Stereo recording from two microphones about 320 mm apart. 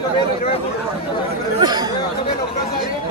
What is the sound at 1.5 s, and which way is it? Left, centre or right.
Speech, centre.